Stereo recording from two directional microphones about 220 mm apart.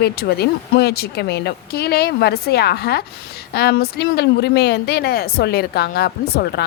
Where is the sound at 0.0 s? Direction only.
45° left (ahead or behind).